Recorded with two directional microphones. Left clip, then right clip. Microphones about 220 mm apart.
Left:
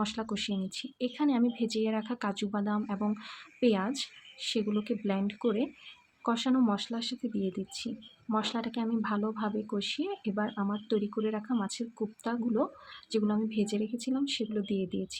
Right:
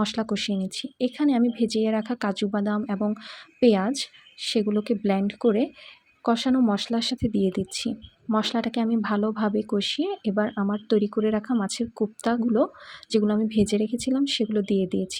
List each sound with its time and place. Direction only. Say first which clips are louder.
0.0 s speech: right 7 dB; 25° right (ahead or behind)